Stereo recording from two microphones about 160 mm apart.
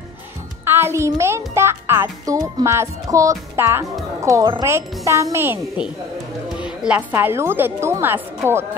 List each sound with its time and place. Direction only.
0.7 s a child's voice: 15° right (ahead or behind)